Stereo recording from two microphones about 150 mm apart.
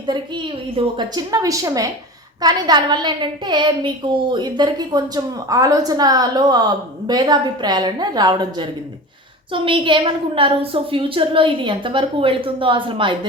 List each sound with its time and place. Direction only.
0.0 s a woman's voice: 30° right (ahead or behind)